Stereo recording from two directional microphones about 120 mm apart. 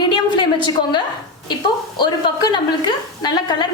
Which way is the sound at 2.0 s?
40° left (ahead or behind).